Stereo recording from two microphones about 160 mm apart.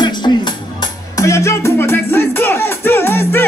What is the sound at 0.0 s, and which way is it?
Music, 30° left (ahead or behind).